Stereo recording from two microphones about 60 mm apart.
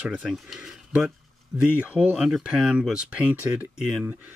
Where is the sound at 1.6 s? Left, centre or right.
Right.